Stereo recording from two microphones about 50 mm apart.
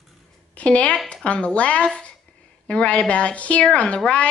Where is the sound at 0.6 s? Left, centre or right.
Left.